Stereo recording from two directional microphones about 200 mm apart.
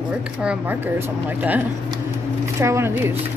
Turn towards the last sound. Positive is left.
turn(degrees=-10)  # may be behind; listen again after turning